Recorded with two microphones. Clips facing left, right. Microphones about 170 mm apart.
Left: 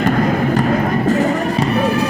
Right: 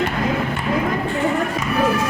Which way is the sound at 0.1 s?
40° left (ahead or behind).